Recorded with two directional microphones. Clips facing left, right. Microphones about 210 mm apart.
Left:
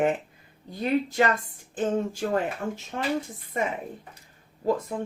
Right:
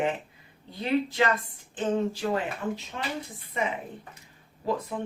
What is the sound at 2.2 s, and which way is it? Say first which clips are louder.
Speech: left 2 dB; 45° left (ahead or behind).